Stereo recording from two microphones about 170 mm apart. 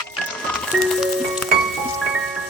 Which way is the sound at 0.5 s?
Centre (ahead or behind).